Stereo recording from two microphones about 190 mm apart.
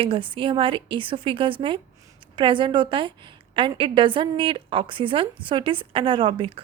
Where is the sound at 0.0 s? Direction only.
25° right (ahead or behind).